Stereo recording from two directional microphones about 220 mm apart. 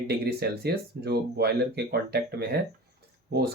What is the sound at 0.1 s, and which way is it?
Speech, 45° right (ahead or behind).